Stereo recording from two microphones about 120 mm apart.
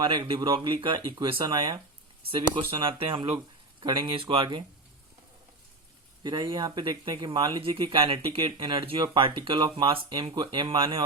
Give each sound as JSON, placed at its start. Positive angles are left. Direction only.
{"t": 0.0, "sound": "speech", "side_deg": -40}
{"t": 6.2, "sound": "speech", "side_deg": -40}